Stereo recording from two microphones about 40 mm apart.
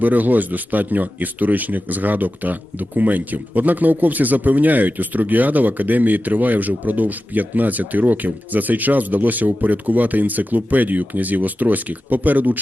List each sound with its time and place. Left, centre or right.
0.0 s speech: right